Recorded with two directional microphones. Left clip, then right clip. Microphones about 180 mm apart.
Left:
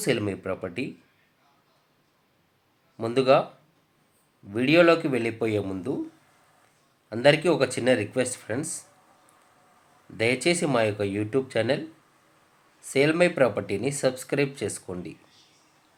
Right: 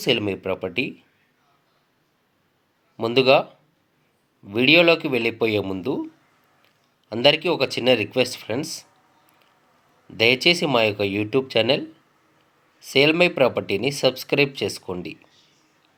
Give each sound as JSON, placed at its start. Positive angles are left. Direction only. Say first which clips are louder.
{"t": 0.0, "sound": "speech", "louder": "right 5 dB", "side_deg": -20}
{"t": 3.0, "sound": "speech", "louder": "right 4 dB", "side_deg": -20}
{"t": 4.4, "sound": "speech", "louder": "right 4 dB", "side_deg": -20}
{"t": 7.1, "sound": "speech", "louder": "right 2 dB", "side_deg": -20}
{"t": 10.2, "sound": "speech", "louder": "right 6 dB", "side_deg": -20}
{"t": 12.9, "sound": "speech", "louder": "right 4 dB", "side_deg": -20}